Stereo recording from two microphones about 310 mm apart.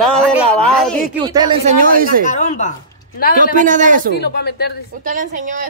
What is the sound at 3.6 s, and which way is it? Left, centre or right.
Speech, right.